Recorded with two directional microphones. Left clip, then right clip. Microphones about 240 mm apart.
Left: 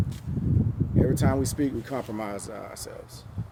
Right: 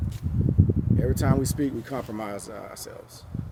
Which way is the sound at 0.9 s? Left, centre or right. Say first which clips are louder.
Left 3 dB; centre.